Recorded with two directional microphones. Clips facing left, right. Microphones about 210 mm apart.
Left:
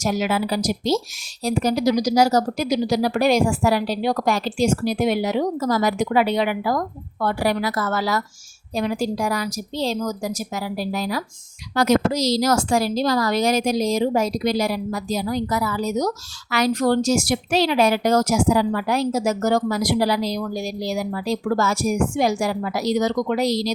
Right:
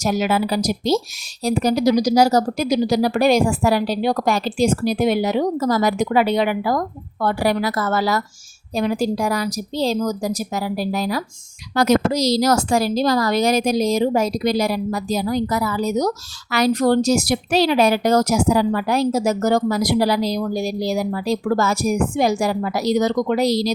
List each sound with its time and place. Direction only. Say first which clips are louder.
0.0 s a woman's voice: right 2 dB; 40° right (ahead or behind)